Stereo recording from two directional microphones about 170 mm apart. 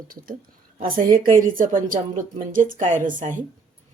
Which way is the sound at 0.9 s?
55° right (ahead or behind).